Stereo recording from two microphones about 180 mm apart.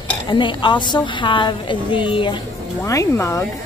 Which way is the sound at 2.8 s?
15° left (ahead or behind).